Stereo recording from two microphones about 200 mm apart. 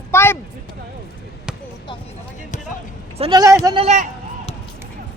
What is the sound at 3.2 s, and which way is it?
Speech, 20° right (ahead or behind).